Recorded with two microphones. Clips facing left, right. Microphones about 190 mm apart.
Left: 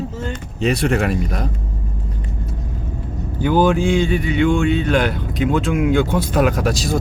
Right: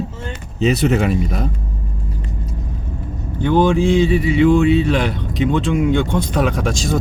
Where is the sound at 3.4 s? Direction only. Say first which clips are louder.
Right 1 dB; 5° left (ahead or behind).